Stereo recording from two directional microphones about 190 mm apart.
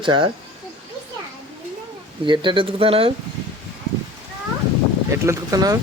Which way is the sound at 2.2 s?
25° right (ahead or behind).